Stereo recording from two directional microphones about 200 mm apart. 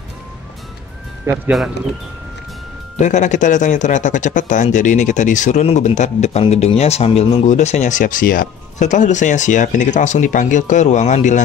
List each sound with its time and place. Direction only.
1.2 s speech: centre (ahead or behind)
3.0 s speech: 35° left (ahead or behind)